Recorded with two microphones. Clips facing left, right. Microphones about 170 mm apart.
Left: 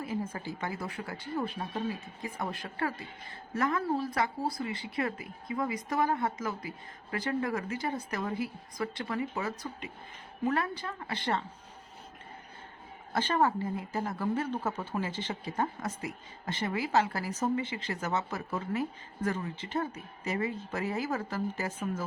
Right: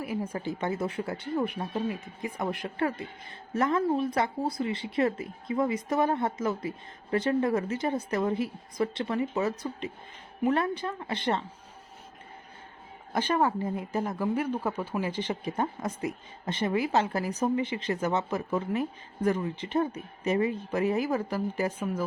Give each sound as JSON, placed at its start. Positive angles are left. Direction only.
{"t": 0.3, "sound": "a woman's voice", "side_deg": -25}
{"t": 13.1, "sound": "a woman's voice", "side_deg": -15}